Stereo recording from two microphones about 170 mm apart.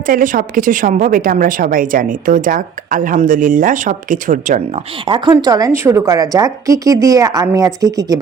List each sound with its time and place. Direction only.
0.0 s a woman's voice: 55° right (ahead or behind)
5.0 s a woman's voice: 30° right (ahead or behind)